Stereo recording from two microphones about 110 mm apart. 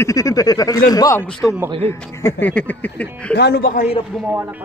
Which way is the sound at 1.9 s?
25° left (ahead or behind).